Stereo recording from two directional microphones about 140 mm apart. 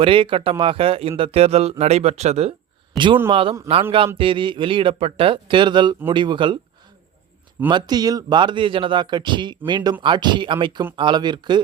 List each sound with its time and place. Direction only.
0.0 s speech: 40° right (ahead or behind)
7.7 s speech: 30° right (ahead or behind)